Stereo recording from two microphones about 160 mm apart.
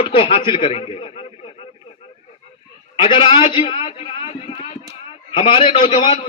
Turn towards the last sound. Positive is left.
turn(degrees=35)  # may be behind; listen again after turning